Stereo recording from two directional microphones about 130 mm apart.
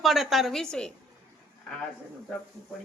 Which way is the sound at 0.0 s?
Centre (ahead or behind).